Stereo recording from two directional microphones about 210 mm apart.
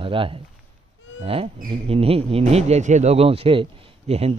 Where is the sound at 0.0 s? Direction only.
25° right (ahead or behind).